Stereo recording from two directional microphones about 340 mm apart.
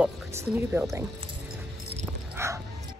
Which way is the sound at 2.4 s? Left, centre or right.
Centre.